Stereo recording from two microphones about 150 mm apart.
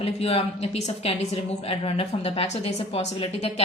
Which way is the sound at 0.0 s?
40° left (ahead or behind).